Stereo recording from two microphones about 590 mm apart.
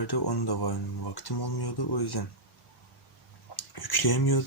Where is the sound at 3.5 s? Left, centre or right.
Left.